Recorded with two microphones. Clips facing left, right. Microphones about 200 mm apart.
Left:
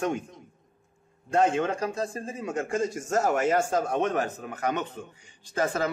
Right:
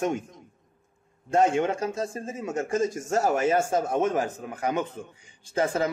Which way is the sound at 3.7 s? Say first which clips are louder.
Right 1 dB; 10° right (ahead or behind).